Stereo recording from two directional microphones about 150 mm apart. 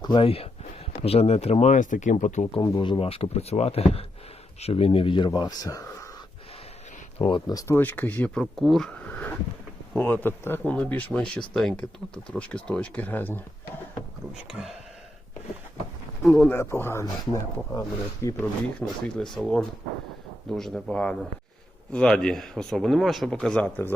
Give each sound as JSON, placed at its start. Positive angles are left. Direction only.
{"t": 0.0, "sound": "speech", "side_deg": 30}
{"t": 2.5, "sound": "speech", "side_deg": 35}
{"t": 7.2, "sound": "speech", "side_deg": 35}
{"t": 7.8, "sound": "speech", "side_deg": 10}
{"t": 14.5, "sound": "speech", "side_deg": 0}
{"t": 16.2, "sound": "speech", "side_deg": 5}
{"t": 19.0, "sound": "speech", "side_deg": 5}